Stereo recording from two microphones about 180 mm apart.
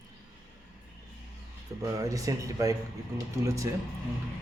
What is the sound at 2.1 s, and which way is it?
A man's voice, 20° right (ahead or behind).